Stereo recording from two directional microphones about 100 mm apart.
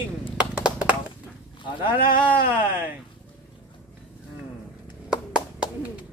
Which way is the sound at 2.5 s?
20° right (ahead or behind).